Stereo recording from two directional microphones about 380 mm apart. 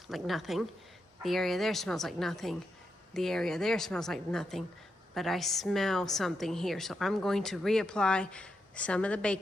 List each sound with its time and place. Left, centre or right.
0.1 s a woman's voice: centre